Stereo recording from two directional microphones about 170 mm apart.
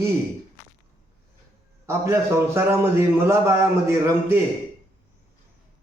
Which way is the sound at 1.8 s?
15° right (ahead or behind).